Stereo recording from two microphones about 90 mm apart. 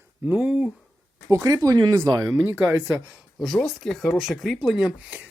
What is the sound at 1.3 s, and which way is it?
Speech, 40° right (ahead or behind).